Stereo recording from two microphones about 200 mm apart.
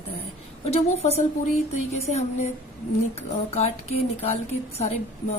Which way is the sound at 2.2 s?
35° left (ahead or behind).